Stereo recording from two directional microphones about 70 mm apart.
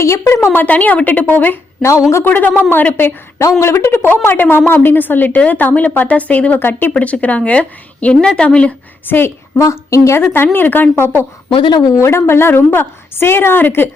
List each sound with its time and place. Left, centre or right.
0.0 s a woman's voice: left
0.5 s a woman's voice: left
3.6 s a woman's voice: left; by 8.7 s centre
9.0 s a woman's voice: left
9.6 s a woman's voice: left
10.3 s a woman's voice: left
11.4 s speech: left
12.0 s a woman's voice: left